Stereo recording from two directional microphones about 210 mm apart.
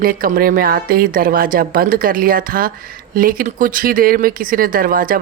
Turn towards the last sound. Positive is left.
turn(degrees=-40)  # may be behind; listen again after turning